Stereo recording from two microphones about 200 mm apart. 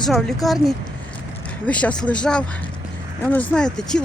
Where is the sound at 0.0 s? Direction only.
Centre (ahead or behind).